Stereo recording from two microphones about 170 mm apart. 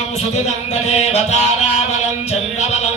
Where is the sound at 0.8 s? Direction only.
40° left (ahead or behind).